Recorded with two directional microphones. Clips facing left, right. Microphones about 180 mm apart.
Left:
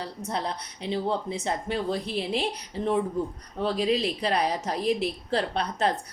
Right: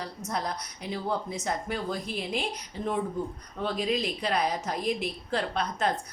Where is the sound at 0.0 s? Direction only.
30° left (ahead or behind).